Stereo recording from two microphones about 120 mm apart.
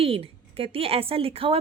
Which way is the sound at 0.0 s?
55° right (ahead or behind).